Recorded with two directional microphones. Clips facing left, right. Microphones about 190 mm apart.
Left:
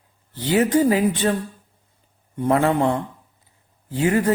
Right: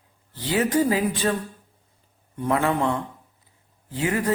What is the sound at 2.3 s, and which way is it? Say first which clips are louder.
Speech: left 4 dB; 25° left (ahead or behind).